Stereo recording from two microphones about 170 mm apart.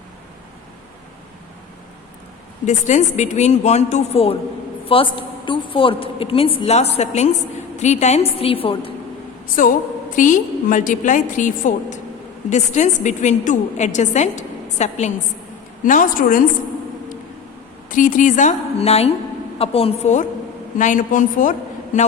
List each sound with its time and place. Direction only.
2.6 s a woman's voice: 45° left (ahead or behind)
10.2 s a woman's voice: 50° left (ahead or behind)
17.8 s a woman's voice: 50° left (ahead or behind)